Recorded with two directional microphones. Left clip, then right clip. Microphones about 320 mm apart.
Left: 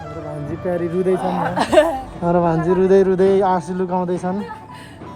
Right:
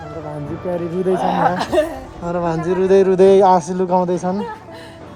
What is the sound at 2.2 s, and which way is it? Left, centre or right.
Speech, centre.